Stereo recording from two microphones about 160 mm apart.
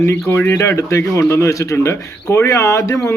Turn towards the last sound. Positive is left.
turn(degrees=20)  # may be behind; listen again after turning